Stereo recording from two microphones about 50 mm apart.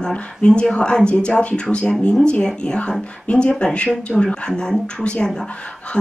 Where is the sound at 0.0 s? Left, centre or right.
Left.